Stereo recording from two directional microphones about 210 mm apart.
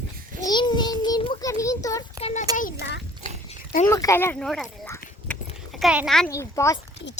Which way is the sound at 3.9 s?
15° left (ahead or behind).